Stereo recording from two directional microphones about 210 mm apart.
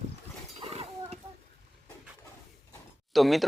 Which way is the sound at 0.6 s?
30° right (ahead or behind).